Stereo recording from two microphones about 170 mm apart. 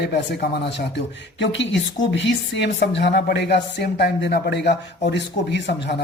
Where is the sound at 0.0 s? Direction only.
75° left (ahead or behind).